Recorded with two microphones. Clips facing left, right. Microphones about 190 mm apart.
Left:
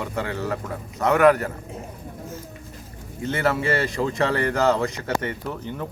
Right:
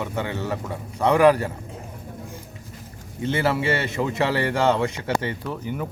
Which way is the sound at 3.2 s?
25° right (ahead or behind).